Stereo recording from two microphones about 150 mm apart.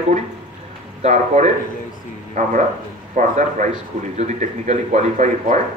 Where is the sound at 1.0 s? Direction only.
50° right (ahead or behind).